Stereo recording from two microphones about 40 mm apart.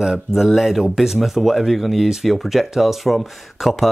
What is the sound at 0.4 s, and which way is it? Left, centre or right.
Speech, centre.